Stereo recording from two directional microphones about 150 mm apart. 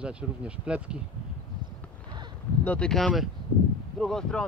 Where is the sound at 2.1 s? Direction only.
30° right (ahead or behind).